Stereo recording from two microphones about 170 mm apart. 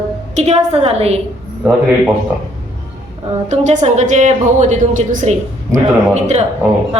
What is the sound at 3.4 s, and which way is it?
A woman's voice, 45° right (ahead or behind).